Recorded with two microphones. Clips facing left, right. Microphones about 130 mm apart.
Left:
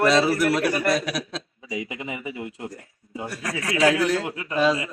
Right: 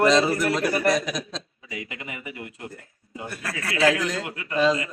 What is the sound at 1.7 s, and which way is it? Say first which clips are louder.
A man's voice: left 5 dB; 20° left (ahead or behind).